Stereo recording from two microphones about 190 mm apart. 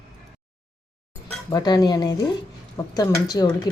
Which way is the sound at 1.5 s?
20° left (ahead or behind).